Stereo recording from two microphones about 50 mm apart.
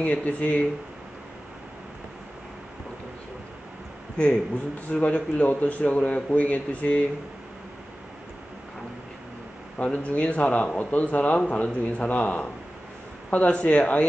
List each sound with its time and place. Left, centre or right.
0.0 s speech: left
4.2 s speech: left
10.0 s speech: left